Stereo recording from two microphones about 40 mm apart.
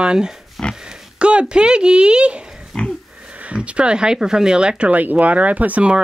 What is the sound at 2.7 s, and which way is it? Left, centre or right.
Pig, left.